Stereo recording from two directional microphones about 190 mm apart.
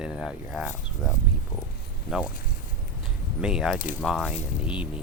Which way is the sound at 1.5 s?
20° left (ahead or behind).